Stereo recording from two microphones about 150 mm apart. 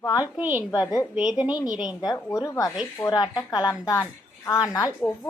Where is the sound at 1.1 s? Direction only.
5° right (ahead or behind).